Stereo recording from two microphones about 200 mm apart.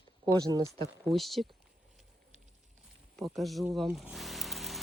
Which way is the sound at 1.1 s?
Centre (ahead or behind).